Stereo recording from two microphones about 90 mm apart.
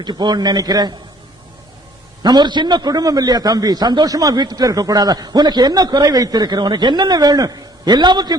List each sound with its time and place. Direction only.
0.0 s a man's voice: 55° right (ahead or behind)
2.2 s a man's voice: 55° right (ahead or behind)